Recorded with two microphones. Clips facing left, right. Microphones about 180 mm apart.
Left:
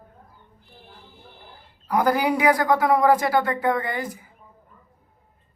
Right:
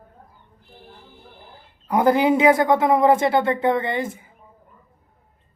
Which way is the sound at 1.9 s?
25° right (ahead or behind).